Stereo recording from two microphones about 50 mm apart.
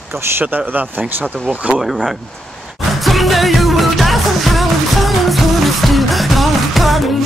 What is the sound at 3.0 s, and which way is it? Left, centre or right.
Music, centre.